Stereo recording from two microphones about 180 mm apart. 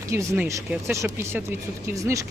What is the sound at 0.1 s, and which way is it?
Speech, 15° right (ahead or behind).